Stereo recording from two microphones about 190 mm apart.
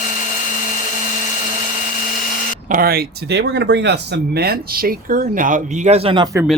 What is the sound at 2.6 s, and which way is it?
Speech, 50° right (ahead or behind).